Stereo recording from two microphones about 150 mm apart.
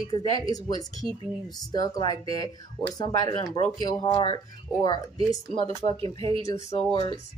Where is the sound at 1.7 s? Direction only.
25° left (ahead or behind).